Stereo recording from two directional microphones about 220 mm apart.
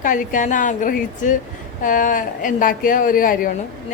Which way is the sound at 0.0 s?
40° left (ahead or behind).